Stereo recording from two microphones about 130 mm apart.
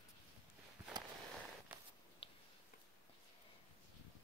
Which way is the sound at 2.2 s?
45° left (ahead or behind).